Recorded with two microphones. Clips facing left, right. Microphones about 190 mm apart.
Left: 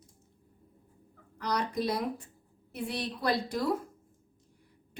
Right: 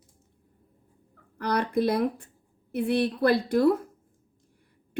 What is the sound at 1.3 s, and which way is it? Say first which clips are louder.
Speech: right 6 dB; 60° right (ahead or behind).